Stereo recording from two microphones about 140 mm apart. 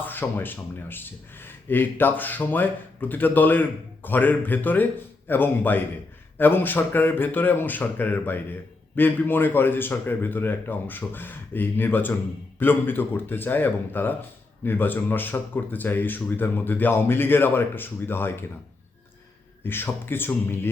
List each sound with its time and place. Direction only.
0.0 s speech: 15° left (ahead or behind)
19.6 s speech: 15° left (ahead or behind)